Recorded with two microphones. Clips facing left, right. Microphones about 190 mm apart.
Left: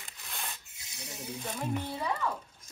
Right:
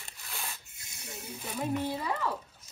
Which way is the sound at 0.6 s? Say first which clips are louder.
Left 1 dB; 55° right (ahead or behind).